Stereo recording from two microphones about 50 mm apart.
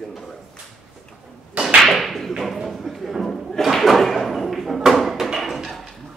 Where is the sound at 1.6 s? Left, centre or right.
Centre.